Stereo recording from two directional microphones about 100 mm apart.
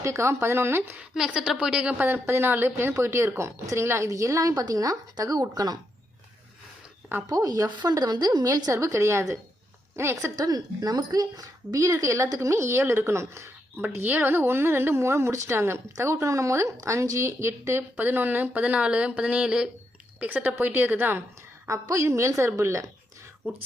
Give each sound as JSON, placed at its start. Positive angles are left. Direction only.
{"t": 0.0, "sound": "a woman's voice", "side_deg": -30}
{"t": 1.1, "sound": "a woman's voice", "side_deg": -5}
{"t": 7.3, "sound": "a woman's voice", "side_deg": -40}